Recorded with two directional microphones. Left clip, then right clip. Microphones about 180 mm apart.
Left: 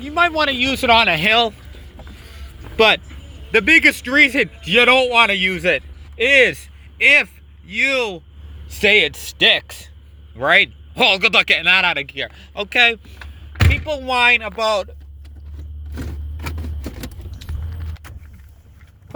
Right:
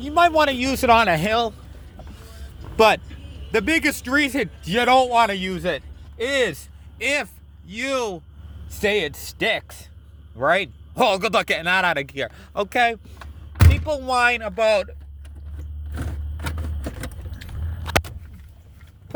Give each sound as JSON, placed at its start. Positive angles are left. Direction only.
{"t": 0.0, "sound": "speech", "side_deg": -25}
{"t": 1.3, "sound": "a man's voice", "side_deg": 0}
{"t": 2.4, "sound": "music", "side_deg": -10}
{"t": 3.5, "sound": "a man's voice", "side_deg": -10}
{"t": 5.5, "sound": "a man's voice", "side_deg": 10}
{"t": 11.9, "sound": "speech", "side_deg": -45}
{"t": 12.6, "sound": "speech", "side_deg": -20}
{"t": 13.7, "sound": "door", "side_deg": 0}
{"t": 14.2, "sound": "speech", "side_deg": 15}